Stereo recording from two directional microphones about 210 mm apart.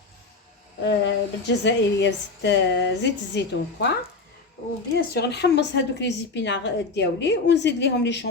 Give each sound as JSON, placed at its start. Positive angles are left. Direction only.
{"t": 0.9, "sound": "a woman's voice", "side_deg": 55}
{"t": 4.9, "sound": "a woman's voice", "side_deg": 50}